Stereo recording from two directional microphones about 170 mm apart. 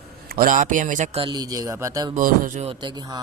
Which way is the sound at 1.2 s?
25° right (ahead or behind).